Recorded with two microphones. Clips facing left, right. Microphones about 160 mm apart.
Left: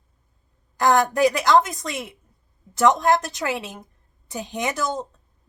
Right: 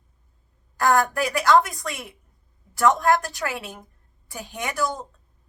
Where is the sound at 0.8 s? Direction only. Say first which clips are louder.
Left 3 dB; 20° left (ahead or behind).